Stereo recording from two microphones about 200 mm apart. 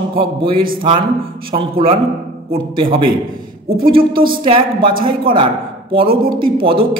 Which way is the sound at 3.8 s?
25° right (ahead or behind).